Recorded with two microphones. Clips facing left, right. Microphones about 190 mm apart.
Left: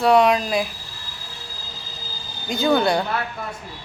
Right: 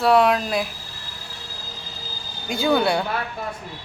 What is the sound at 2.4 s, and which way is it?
Speech, 10° right (ahead or behind).